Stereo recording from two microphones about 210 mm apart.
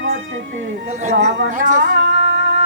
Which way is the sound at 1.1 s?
55° right (ahead or behind).